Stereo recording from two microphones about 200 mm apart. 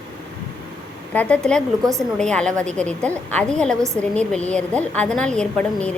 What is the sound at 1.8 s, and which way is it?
Speech, 15° right (ahead or behind).